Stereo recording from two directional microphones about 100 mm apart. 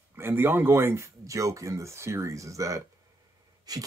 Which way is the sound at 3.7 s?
40° right (ahead or behind).